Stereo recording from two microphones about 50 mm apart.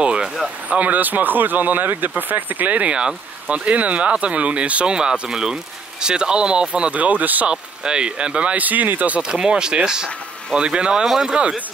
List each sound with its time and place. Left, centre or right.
0.0 s vehicle: right
0.7 s speech: right
7.5 s speech: centre; by 9.1 s right
9.3 s speech: centre